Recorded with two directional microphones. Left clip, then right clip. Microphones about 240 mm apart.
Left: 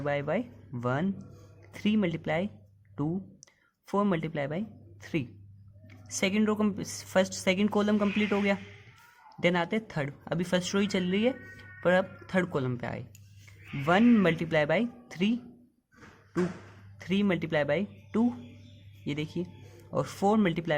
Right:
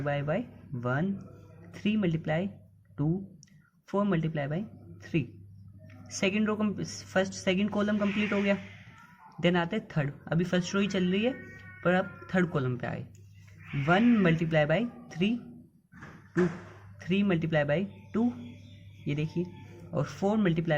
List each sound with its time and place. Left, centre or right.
0.0 s speech: left
3.8 s speech: left
6.1 s speech: left
17.0 s speech: left